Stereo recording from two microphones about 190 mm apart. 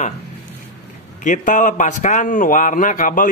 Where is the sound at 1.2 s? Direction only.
40° left (ahead or behind).